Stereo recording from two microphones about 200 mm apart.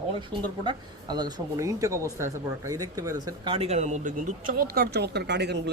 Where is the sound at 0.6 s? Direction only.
20° right (ahead or behind).